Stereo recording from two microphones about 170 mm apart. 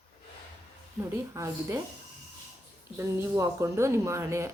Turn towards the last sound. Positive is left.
turn(degrees=-15)  # may be behind; listen again after turning